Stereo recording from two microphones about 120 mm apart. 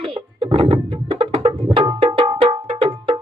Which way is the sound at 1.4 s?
45° right (ahead or behind).